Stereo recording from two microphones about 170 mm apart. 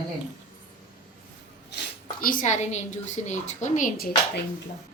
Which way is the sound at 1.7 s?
70° left (ahead or behind).